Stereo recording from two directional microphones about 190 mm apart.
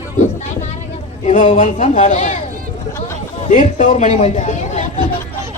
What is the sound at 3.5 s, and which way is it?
Speech, 40° left (ahead or behind).